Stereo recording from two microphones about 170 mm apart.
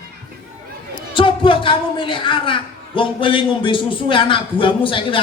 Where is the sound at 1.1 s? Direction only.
30° left (ahead or behind).